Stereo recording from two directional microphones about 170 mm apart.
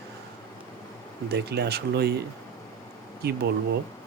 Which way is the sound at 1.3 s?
70° right (ahead or behind).